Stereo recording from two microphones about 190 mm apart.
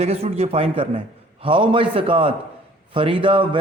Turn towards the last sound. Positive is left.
turn(degrees=-25)  # may be behind; listen again after turning